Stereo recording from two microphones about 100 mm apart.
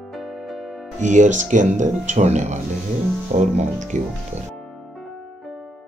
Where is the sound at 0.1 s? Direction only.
Centre (ahead or behind).